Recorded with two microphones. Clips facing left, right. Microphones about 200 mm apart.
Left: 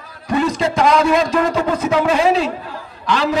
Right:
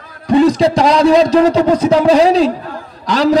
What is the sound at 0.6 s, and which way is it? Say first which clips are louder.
A man's voice: right 5 dB; 35° right (ahead or behind).